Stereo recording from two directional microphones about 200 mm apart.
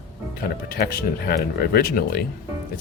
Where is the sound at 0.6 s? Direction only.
50° left (ahead or behind).